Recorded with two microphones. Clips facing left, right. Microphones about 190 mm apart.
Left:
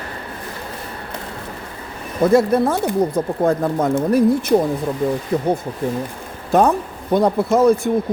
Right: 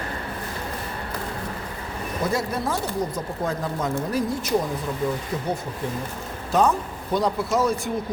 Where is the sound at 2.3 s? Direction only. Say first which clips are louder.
Left 11 dB; 55° left (ahead or behind).